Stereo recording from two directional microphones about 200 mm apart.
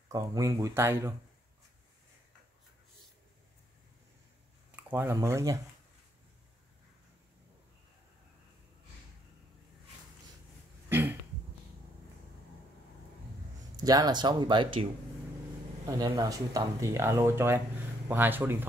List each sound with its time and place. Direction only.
0.1 s speech: 15° right (ahead or behind)
4.7 s speech: 10° right (ahead or behind)
10.9 s throat clearing: 10° right (ahead or behind)
13.7 s speech: 20° right (ahead or behind)
16.0 s speech: 20° right (ahead or behind)